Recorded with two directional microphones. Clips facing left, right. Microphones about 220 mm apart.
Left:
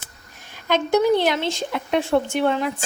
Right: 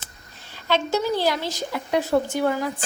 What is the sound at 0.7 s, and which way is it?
Speech, 60° left (ahead or behind).